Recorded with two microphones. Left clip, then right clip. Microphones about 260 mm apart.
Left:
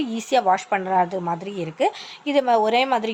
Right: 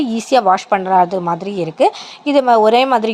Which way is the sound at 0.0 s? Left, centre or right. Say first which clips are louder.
Right 7 dB; right.